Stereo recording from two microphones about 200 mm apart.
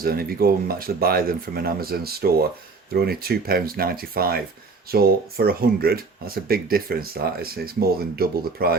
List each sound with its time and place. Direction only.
0.0 s speech: 50° right (ahead or behind)